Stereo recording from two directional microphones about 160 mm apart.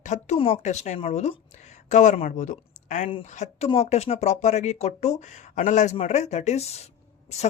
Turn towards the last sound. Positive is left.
turn(degrees=40)  # may be behind; listen again after turning